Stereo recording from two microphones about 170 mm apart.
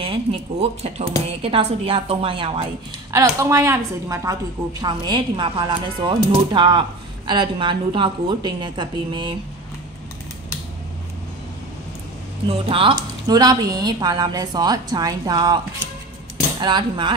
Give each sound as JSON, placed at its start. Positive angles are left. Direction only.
{"t": 0.0, "sound": "a woman's voice", "side_deg": -30}
{"t": 3.1, "sound": "a woman's voice", "side_deg": -20}
{"t": 12.6, "sound": "speech", "side_deg": -30}
{"t": 16.6, "sound": "speech", "side_deg": -25}